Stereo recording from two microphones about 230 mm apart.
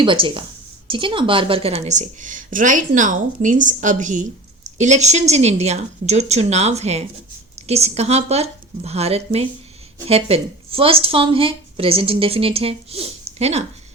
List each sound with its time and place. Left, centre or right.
0.0 s a woman's voice: right